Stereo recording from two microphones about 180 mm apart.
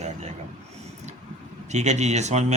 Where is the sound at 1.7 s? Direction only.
40° right (ahead or behind).